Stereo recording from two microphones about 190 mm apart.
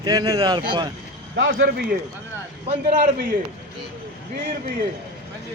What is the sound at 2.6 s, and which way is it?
Speech, 35° right (ahead or behind).